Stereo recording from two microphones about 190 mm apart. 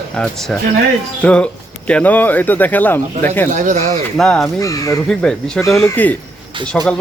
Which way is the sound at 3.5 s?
40° right (ahead or behind).